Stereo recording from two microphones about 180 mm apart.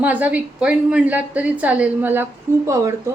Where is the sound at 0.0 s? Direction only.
10° right (ahead or behind).